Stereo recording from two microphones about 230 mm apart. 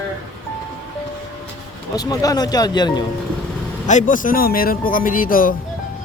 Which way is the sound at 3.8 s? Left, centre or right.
Left.